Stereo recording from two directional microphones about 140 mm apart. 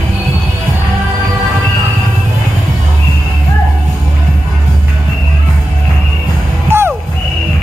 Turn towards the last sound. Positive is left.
turn(degrees=-15)  # may be behind; listen again after turning